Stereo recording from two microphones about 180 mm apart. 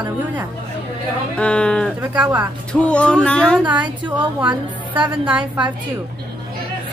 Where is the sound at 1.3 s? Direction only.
5° left (ahead or behind).